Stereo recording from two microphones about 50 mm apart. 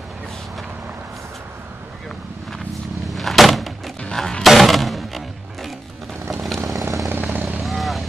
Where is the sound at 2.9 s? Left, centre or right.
Centre.